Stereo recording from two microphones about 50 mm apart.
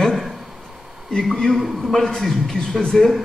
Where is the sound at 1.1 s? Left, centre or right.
Centre.